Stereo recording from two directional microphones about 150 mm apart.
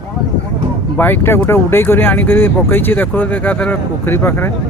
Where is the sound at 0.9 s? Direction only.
15° left (ahead or behind).